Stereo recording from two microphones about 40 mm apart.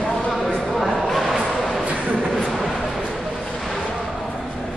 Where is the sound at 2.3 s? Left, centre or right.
Centre.